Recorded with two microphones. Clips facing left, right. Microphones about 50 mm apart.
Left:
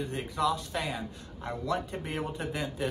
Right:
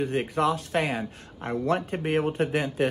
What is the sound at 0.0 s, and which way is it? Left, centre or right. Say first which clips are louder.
Speech: right 5 dB; right.